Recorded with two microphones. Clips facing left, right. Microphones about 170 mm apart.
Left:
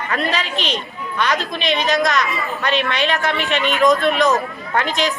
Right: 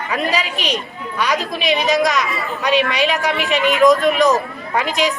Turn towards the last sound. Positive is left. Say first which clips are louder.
# right 1 dB
turn(degrees=0)  # may be behind; listen again after turning